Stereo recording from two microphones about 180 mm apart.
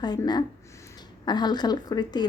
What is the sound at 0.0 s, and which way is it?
Speech, 25° left (ahead or behind).